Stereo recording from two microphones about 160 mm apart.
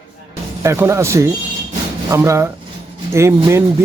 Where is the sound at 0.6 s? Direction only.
15° right (ahead or behind).